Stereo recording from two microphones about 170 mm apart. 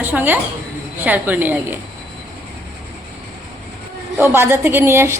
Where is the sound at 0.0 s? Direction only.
10° right (ahead or behind).